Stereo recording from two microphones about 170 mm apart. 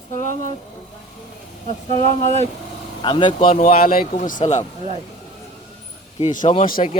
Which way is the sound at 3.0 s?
30° left (ahead or behind).